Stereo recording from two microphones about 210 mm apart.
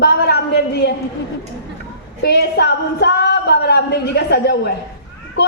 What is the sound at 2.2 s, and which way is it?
A woman's voice, 50° left (ahead or behind).